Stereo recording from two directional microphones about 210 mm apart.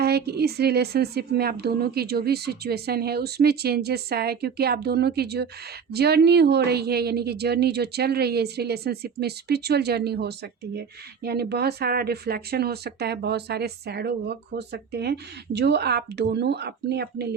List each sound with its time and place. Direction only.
0.0 s a woman's voice: 50° right (ahead or behind)